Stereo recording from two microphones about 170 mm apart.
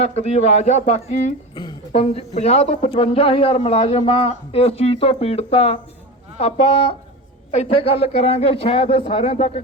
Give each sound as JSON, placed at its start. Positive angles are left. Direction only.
{"t": 0.0, "sound": "speech", "side_deg": 40}